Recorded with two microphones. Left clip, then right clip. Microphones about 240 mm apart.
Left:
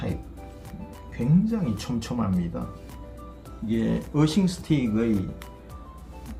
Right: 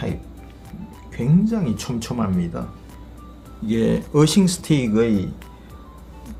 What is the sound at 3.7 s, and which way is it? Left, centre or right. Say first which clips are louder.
Speech: right 7 dB; right.